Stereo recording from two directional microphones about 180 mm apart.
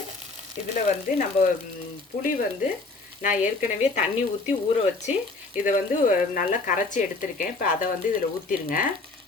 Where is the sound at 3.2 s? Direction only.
45° left (ahead or behind).